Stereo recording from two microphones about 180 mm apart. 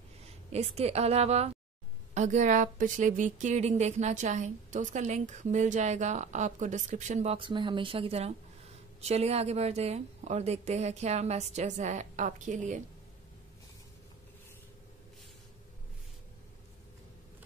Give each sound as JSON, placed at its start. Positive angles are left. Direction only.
{"t": 0.3, "sound": "a woman's voice", "side_deg": -35}
{"t": 7.3, "sound": "a woman's voice", "side_deg": -25}